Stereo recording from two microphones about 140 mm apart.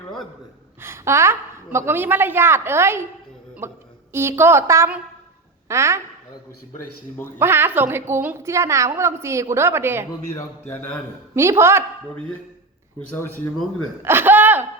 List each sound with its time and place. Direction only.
0.8 s a woman's voice: 20° right (ahead or behind)
4.1 s a woman's voice: 20° right (ahead or behind)
7.3 s a woman's voice: 15° right (ahead or behind)
10.3 s speech: 10° left (ahead or behind)
11.3 s a woman's voice: 20° right (ahead or behind)
13.1 s speech: 15° left (ahead or behind)
14.0 s speech: 15° right (ahead or behind)